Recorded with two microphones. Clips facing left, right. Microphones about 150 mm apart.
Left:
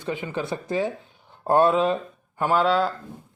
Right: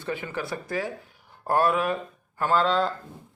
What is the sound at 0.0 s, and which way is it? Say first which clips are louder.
Speech: left 3 dB; 15° left (ahead or behind).